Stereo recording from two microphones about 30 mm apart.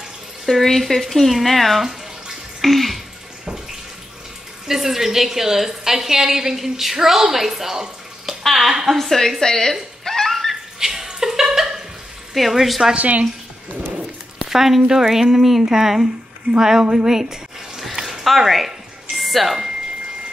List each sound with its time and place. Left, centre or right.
0.5 s speech: centre
4.6 s a woman's voice: centre
8.3 s bathtub: centre
8.9 s a woman's voice: centre
10.0 s a sound: centre
10.8 s a sound: centre
12.4 s speech: centre
12.9 s speech: right
14.4 s a sound: centre
14.9 s a woman's voice: centre
16.9 s a sound: centre
19.1 s music: centre